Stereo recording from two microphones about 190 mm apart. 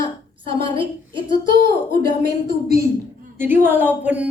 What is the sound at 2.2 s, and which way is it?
Speech, 55° right (ahead or behind).